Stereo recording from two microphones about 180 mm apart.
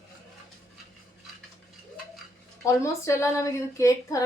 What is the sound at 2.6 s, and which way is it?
A woman's voice, 15° left (ahead or behind).